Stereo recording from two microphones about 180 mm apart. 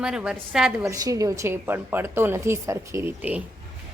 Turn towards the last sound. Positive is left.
turn(degrees=-10)  # may be behind; listen again after turning